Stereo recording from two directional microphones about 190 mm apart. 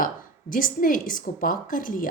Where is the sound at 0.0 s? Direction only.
45° left (ahead or behind).